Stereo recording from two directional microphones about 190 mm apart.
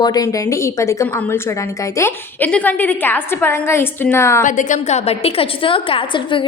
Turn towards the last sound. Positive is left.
turn(degrees=25)  # may be behind; listen again after turning